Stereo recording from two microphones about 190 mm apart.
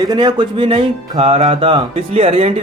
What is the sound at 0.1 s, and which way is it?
Speech, 20° right (ahead or behind).